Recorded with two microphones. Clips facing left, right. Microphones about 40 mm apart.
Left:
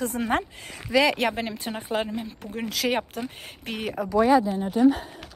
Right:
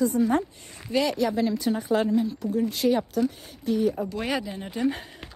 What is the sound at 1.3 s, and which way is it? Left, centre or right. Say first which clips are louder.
Speech: right 6 dB; left.